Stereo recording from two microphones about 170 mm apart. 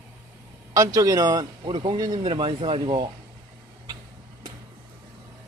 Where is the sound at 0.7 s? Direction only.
20° right (ahead or behind).